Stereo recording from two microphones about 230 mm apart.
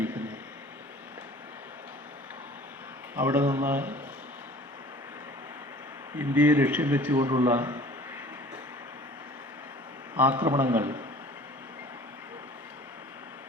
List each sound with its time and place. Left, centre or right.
0.0 s a sound: centre
3.2 s a man's voice: centre
6.1 s a man's voice: centre
10.2 s a man's voice: centre